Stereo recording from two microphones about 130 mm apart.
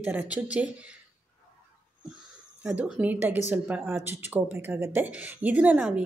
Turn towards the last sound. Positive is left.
turn(degrees=-10)  # may be behind; listen again after turning